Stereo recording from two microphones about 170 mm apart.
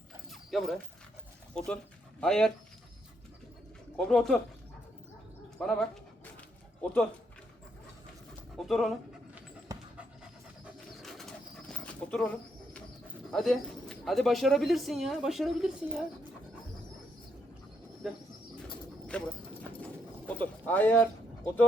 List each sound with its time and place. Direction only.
0.3 s dog: centre (ahead or behind)
1.5 s speech: 5° left (ahead or behind)
3.9 s speech: 5° left (ahead or behind)
5.5 s speech: 5° left (ahead or behind)
8.5 s speech: centre (ahead or behind)
9.7 s pant: 20° right (ahead or behind)
11.0 s pigeon: centre (ahead or behind)
13.3 s speech: 5° left (ahead or behind)
18.0 s speech: centre (ahead or behind)
19.8 s pigeon: 10° left (ahead or behind)